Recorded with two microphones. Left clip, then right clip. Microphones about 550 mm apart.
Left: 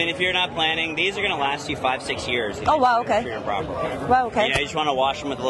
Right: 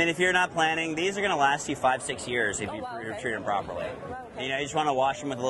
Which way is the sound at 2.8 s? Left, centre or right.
Left.